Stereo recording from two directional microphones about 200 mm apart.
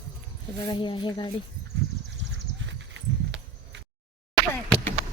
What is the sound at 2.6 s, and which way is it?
Horse, 65° right (ahead or behind).